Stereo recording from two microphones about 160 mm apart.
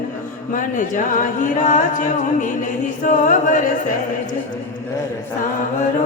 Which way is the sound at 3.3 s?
55° left (ahead or behind).